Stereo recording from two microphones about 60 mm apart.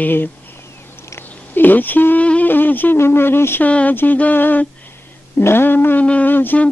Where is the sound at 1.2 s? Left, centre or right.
Left.